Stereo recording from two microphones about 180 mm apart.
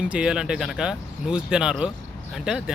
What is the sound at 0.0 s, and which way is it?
Speech, 5° right (ahead or behind).